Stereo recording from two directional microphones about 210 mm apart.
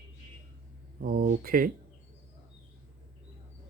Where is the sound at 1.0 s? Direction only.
45° right (ahead or behind).